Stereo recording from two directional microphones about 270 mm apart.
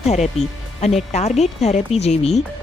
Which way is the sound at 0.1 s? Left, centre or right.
Left.